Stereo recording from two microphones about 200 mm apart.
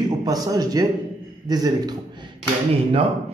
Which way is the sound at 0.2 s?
20° right (ahead or behind).